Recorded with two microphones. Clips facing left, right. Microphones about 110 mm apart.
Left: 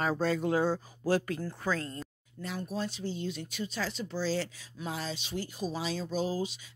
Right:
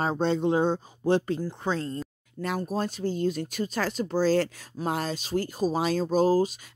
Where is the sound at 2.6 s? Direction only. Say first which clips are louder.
Right 6 dB; 45° right (ahead or behind).